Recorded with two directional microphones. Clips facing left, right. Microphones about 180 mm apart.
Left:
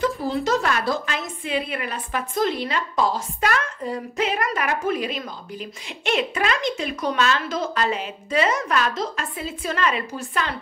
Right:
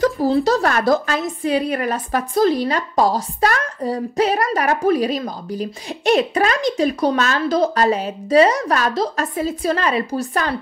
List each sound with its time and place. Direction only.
0.0 s a woman's voice: 35° right (ahead or behind)